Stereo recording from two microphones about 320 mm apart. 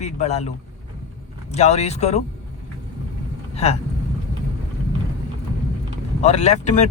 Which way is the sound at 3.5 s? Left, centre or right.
Centre.